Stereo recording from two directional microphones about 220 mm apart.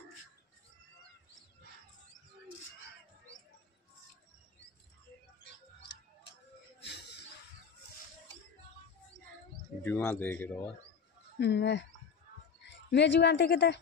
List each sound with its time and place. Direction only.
6.8 s a sound: 50° left (ahead or behind)
9.8 s speech: 10° left (ahead or behind)
11.3 s speech: 50° left (ahead or behind)
12.9 s speech: 50° left (ahead or behind)